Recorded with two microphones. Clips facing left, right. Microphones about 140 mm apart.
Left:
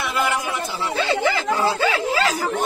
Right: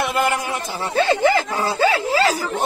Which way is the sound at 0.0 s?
50° right (ahead or behind).